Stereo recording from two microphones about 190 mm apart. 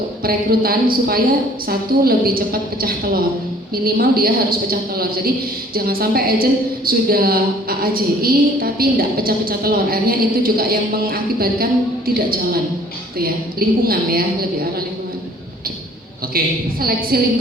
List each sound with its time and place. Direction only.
0.2 s a woman's voice: 50° right (ahead or behind)
17.1 s a woman's voice: 55° right (ahead or behind)